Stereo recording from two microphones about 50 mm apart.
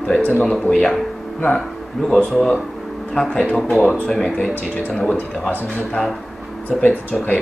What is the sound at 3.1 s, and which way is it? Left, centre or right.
Speech, centre.